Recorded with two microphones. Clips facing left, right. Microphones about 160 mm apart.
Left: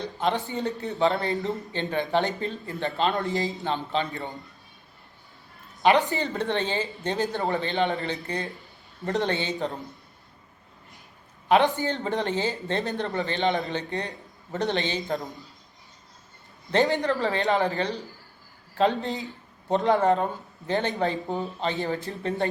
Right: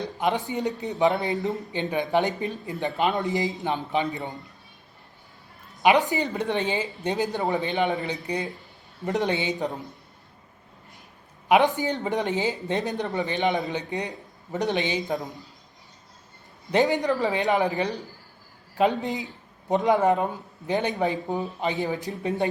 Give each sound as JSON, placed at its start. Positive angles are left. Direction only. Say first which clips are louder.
{"t": 0.0, "sound": "speech", "louder": "right 1 dB", "side_deg": -20}
{"t": 6.1, "sound": "speech", "louder": "right 1 dB", "side_deg": -15}
{"t": 11.7, "sound": "speech", "louder": "right 1 dB", "side_deg": -15}
{"t": 16.7, "sound": "speech", "louder": "right 1 dB", "side_deg": -15}